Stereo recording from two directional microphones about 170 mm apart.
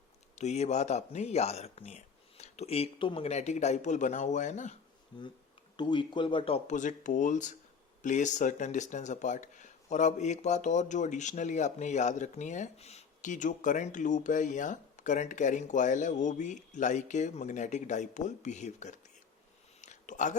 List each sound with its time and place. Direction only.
0.3 s speech: 40° left (ahead or behind)
5.1 s speech: 25° left (ahead or behind); by 18.9 s 45° left (ahead or behind)
19.8 s a sound: 45° left (ahead or behind)